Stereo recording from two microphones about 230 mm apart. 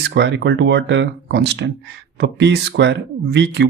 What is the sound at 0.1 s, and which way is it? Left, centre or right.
Speech, right.